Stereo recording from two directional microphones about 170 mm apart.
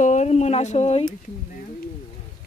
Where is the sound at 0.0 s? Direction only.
45° left (ahead or behind).